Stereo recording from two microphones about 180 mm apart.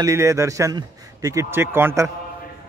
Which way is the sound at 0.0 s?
15° right (ahead or behind).